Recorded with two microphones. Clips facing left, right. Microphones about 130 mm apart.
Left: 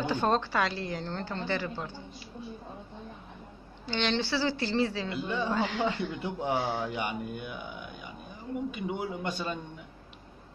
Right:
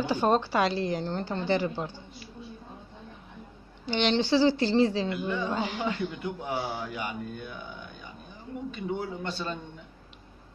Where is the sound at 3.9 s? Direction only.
15° right (ahead or behind).